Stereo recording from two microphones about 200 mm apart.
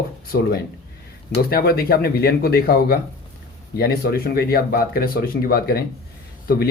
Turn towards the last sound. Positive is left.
turn(degrees=50)  # may be behind; listen again after turning